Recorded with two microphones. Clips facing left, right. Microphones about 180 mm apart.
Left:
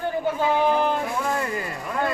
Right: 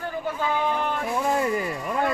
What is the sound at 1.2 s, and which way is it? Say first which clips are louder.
Speech: right 3 dB; 20° right (ahead or behind).